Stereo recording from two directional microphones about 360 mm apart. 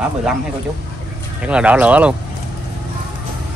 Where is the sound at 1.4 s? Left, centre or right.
Centre.